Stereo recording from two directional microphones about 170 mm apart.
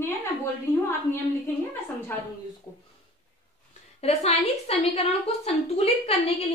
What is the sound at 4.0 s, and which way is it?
A woman's voice, 35° left (ahead or behind).